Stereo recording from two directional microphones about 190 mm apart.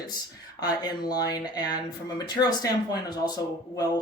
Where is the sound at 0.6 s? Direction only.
20° left (ahead or behind).